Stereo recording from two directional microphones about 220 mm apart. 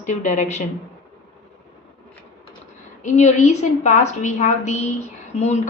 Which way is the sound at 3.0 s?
30° left (ahead or behind).